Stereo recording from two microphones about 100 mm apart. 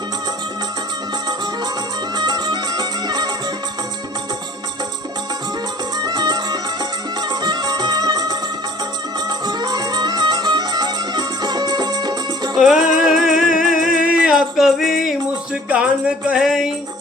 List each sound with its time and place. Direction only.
2.1 s music: 45° right (ahead or behind)
6.0 s music: 45° right (ahead or behind)
12.5 s music: 5° right (ahead or behind)